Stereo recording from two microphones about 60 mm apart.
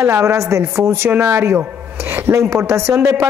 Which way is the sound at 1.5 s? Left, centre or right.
Right.